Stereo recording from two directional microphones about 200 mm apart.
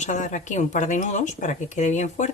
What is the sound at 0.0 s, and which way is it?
Speech, 40° left (ahead or behind).